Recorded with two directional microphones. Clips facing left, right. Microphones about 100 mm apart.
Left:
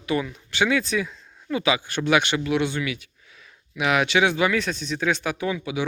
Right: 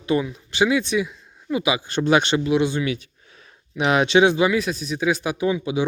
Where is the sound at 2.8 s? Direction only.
30° right (ahead or behind).